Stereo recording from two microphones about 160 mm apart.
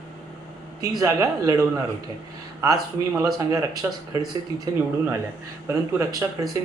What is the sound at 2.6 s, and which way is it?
Speech, 20° right (ahead or behind).